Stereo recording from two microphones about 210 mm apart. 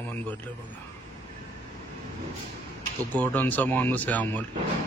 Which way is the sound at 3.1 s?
10° left (ahead or behind).